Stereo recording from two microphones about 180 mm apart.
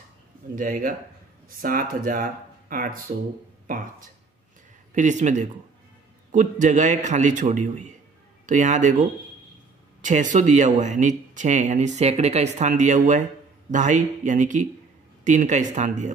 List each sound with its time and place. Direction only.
0.6 s speech: 50° right (ahead or behind)
10.0 s speech: 45° right (ahead or behind)